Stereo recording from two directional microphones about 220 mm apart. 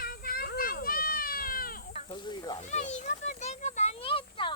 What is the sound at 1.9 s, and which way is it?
Snake, 20° left (ahead or behind).